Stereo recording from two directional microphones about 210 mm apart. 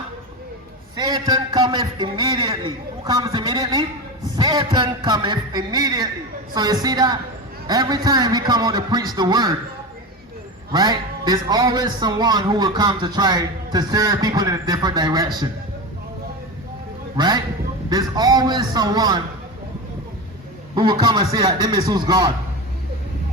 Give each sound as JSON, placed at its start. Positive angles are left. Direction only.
{"t": 0.9, "sound": "a man's voice", "side_deg": -20}
{"t": 10.7, "sound": "a man's voice", "side_deg": -20}
{"t": 17.2, "sound": "a man's voice", "side_deg": -20}
{"t": 20.7, "sound": "a man's voice", "side_deg": -20}